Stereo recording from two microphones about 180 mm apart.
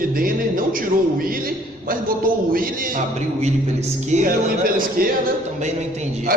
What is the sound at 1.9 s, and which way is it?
Speech, 50° right (ahead or behind).